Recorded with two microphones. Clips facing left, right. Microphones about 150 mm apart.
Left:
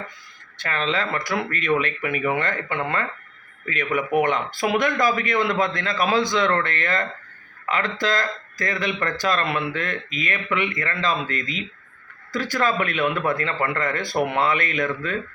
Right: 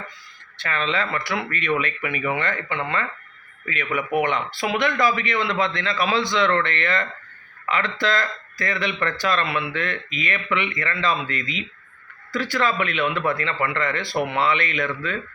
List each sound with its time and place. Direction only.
0.6 s speech: 40° left (ahead or behind)